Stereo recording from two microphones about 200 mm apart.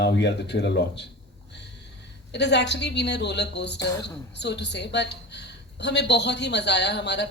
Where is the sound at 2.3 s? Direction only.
60° left (ahead or behind).